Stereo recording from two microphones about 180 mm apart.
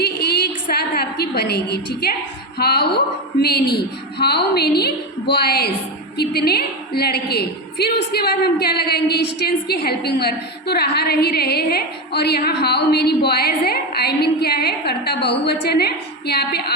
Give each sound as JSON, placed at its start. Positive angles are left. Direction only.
{"t": 0.7, "sound": "a woman's voice", "side_deg": 60}